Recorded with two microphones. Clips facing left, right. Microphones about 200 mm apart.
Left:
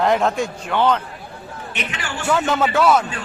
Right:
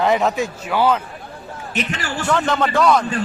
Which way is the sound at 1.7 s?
40° right (ahead or behind).